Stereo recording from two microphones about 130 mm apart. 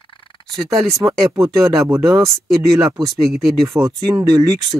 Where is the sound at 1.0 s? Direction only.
20° right (ahead or behind).